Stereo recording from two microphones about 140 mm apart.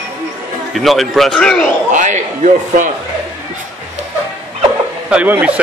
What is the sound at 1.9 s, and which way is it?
A man's voice, 60° right (ahead or behind).